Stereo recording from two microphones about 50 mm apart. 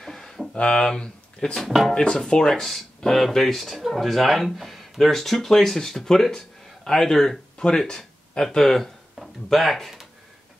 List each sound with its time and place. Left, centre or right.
0.0 s a sound: centre
0.6 s speech: centre
1.6 s speech: centre
2.0 s speech: centre